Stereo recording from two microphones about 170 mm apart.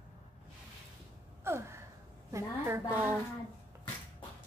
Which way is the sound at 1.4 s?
15° right (ahead or behind).